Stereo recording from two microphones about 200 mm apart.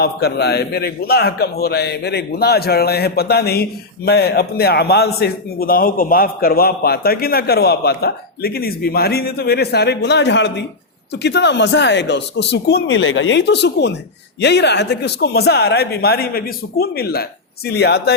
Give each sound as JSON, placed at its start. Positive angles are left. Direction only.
{"t": 0.0, "sound": "a man's voice", "side_deg": 55}